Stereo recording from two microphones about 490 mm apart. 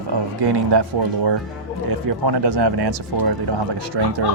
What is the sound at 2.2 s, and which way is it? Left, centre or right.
Speech, right.